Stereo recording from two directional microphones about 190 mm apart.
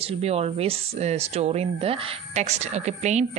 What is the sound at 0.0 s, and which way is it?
Speech, 35° right (ahead or behind).